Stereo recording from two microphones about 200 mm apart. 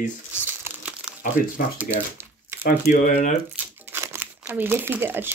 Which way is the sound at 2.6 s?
40° left (ahead or behind).